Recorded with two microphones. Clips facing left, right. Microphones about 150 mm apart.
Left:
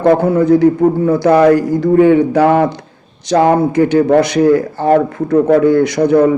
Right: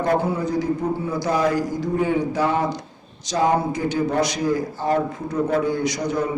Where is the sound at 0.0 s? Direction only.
65° left (ahead or behind).